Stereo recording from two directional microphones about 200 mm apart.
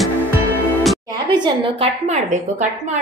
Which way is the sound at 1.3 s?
25° right (ahead or behind).